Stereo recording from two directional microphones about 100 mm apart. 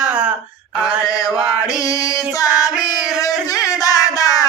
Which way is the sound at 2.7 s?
10° right (ahead or behind).